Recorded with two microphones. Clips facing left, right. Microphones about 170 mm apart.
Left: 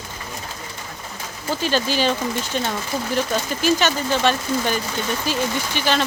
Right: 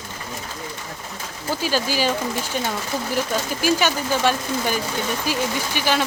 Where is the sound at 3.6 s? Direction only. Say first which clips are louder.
Left 1 dB; 10° right (ahead or behind).